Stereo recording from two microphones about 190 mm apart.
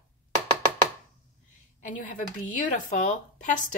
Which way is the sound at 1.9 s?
40° left (ahead or behind).